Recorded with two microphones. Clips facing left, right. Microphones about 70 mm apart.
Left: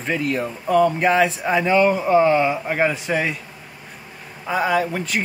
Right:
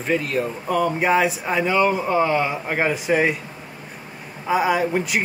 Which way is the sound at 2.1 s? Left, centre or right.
Left.